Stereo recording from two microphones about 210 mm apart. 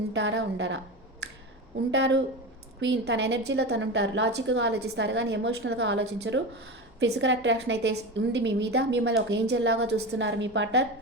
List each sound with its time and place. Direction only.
0.1 s a woman's voice: 60° right (ahead or behind)
1.9 s a woman's voice: 60° right (ahead or behind)